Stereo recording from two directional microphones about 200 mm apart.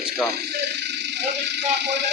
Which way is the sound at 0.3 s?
55° right (ahead or behind).